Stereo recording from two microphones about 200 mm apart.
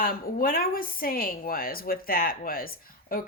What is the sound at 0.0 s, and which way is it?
Speech, 45° left (ahead or behind).